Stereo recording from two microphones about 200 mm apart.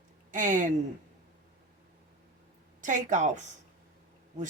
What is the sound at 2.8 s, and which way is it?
Speech, 40° right (ahead or behind).